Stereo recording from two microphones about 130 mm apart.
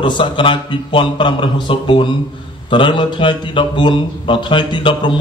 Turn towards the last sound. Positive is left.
turn(degrees=40)  # may be behind; listen again after turning